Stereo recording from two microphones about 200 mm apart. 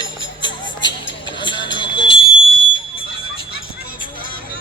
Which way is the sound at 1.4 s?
25° left (ahead or behind).